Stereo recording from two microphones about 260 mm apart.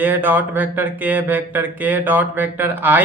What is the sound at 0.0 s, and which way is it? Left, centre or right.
A man's voice, centre.